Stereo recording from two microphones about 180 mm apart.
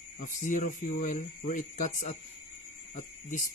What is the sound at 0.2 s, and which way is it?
Speech, 45° left (ahead or behind).